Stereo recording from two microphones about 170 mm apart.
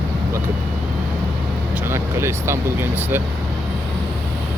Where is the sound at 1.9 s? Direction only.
15° right (ahead or behind).